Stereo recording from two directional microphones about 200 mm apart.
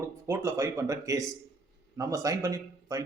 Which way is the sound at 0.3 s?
15° right (ahead or behind).